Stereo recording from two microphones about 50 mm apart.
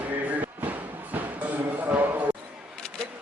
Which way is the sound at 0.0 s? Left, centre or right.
Right.